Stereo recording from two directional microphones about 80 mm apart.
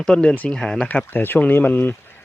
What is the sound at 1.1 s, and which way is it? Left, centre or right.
Speech, left.